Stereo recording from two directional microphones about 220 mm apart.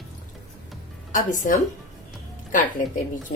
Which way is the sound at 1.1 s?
35° left (ahead or behind).